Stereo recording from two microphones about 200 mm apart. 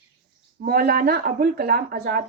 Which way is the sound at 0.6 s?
50° right (ahead or behind).